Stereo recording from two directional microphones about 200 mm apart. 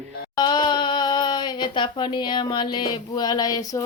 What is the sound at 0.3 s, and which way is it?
Speech, 20° left (ahead or behind).